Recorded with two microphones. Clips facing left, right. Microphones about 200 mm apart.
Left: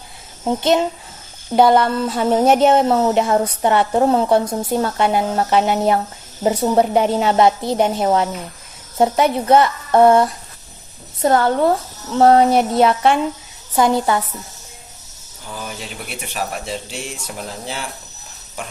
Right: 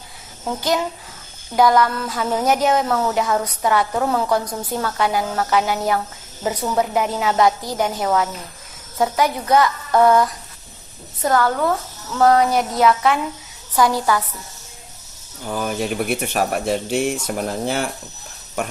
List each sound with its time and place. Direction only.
0.4 s speech: 25° left (ahead or behind)
15.4 s speech: 50° right (ahead or behind)